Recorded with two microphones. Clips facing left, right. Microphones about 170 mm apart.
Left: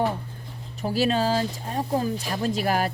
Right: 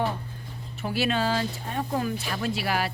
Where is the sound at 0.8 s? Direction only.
35° left (ahead or behind).